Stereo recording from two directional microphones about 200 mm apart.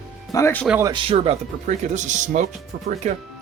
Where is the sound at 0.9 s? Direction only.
25° right (ahead or behind).